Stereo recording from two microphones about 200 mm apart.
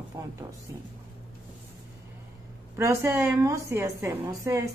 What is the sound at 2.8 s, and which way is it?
Speech, 10° right (ahead or behind).